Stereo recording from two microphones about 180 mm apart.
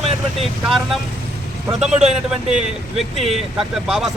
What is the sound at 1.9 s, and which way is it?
Speech, 40° right (ahead or behind).